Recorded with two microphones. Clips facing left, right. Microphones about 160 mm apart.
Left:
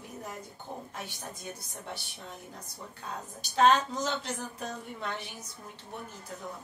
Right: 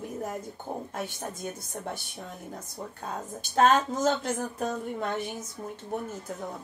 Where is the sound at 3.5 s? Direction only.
50° right (ahead or behind).